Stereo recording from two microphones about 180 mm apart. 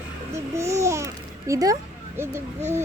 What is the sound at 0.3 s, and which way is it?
Speech, 15° right (ahead or behind).